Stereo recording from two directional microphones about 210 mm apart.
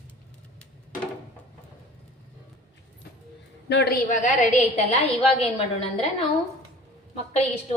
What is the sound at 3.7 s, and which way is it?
Speech, 50° left (ahead or behind).